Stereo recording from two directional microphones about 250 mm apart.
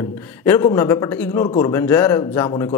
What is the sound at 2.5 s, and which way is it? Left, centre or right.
Speech, centre.